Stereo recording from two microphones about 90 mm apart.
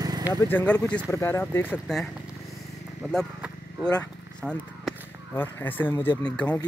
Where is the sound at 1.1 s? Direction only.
30° left (ahead or behind).